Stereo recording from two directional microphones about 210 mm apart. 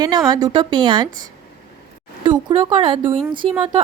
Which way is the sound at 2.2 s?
25° right (ahead or behind).